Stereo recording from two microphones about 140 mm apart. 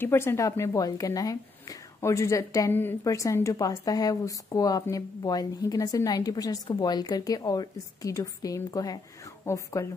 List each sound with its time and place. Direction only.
0.0 s a woman's voice: 15° left (ahead or behind)